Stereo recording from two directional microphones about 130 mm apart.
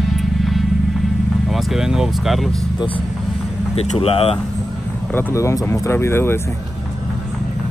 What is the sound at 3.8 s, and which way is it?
Speech, 50° left (ahead or behind).